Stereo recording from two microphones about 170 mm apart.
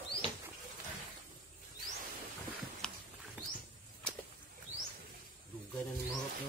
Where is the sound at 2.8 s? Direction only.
5° left (ahead or behind).